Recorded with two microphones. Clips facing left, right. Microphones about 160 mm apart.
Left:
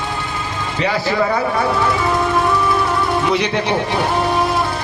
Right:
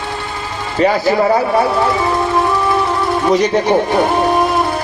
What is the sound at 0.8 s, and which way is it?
Speech, 40° right (ahead or behind).